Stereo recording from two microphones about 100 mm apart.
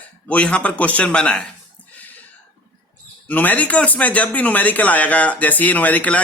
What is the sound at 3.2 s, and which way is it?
A man's voice, 15° left (ahead or behind).